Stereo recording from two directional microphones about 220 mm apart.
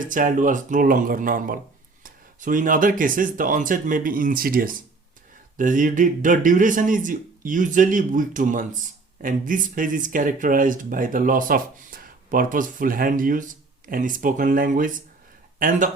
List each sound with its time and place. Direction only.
0.0 s speech: 35° right (ahead or behind)